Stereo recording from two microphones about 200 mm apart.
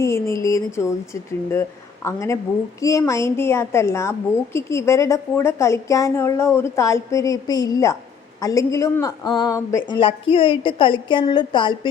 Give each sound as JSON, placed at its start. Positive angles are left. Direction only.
{"t": 0.0, "sound": "a woman's voice", "side_deg": 15}